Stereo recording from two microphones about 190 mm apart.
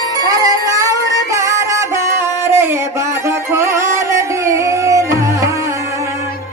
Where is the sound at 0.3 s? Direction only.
20° right (ahead or behind).